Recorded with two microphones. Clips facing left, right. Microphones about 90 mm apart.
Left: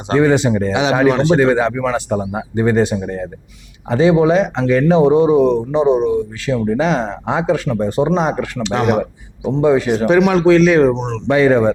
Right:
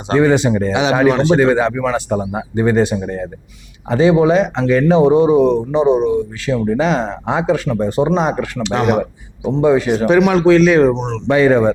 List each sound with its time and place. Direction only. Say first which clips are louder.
0.1 s speech: even; 15° right (ahead or behind)
9.4 s speech: even; 35° right (ahead or behind)
9.6 s speech: even; 15° right (ahead or behind)